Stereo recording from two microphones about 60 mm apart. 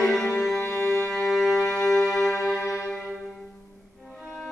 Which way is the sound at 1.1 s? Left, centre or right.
Centre.